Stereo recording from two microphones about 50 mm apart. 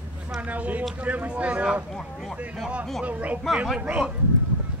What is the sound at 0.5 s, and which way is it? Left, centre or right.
Speech, right.